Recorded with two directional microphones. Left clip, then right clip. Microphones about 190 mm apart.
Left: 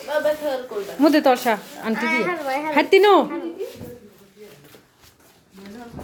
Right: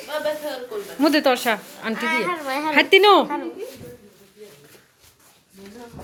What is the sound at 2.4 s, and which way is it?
Speech, 30° right (ahead or behind).